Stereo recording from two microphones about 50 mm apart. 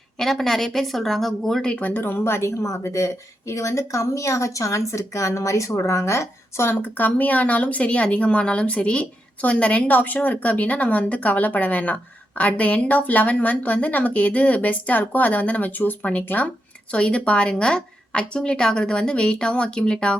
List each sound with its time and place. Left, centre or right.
0.2 s a woman's voice: centre
1.8 s speech: left
6.9 s speech: left